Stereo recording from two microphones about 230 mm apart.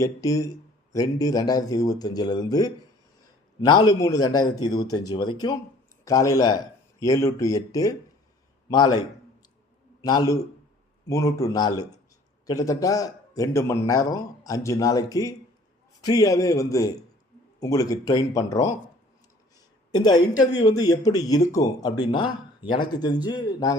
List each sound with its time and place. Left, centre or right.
0.0 s a man's voice: centre
10.0 s a man's voice: centre
19.9 s a woman's voice: centre